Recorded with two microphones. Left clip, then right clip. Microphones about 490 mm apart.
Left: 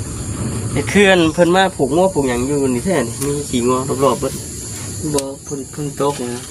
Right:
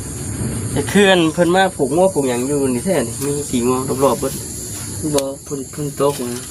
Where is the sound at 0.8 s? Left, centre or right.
Right.